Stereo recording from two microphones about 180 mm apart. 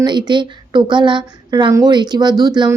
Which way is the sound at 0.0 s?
25° right (ahead or behind).